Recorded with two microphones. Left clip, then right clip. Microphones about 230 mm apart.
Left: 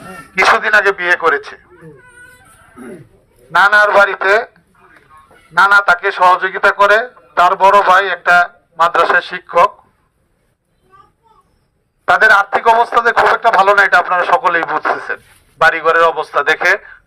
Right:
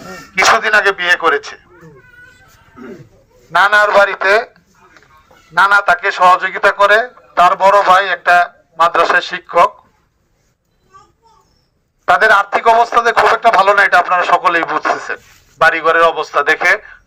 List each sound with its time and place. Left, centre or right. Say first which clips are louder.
0.3 s a man's voice: even; centre
2.8 s speech: even; left
3.5 s a man's voice: left 1 dB; centre
12.0 s a man's voice: left 1 dB; centre